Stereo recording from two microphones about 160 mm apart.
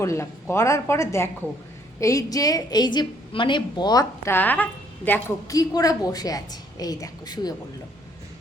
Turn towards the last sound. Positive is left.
turn(degrees=25)  # may be behind; listen again after turning